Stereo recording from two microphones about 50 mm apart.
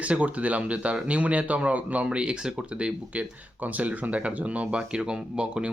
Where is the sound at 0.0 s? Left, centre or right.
Right.